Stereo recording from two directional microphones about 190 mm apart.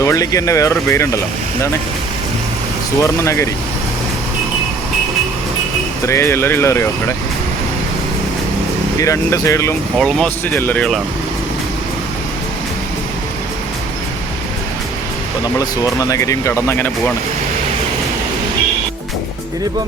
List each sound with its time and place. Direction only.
0.0 s speech: 15° left (ahead or behind)
3.0 s speech: 15° left (ahead or behind)
6.1 s speech: 15° left (ahead or behind)
9.0 s speech: 15° left (ahead or behind)
10.0 s speech: centre (ahead or behind)
15.5 s speech: 15° left (ahead or behind)